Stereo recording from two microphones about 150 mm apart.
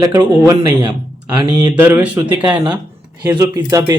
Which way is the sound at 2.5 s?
25° right (ahead or behind).